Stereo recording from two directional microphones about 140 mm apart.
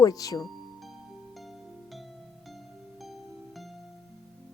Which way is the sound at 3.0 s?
Centre (ahead or behind).